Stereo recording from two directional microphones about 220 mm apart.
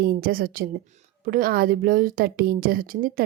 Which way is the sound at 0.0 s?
40° right (ahead or behind).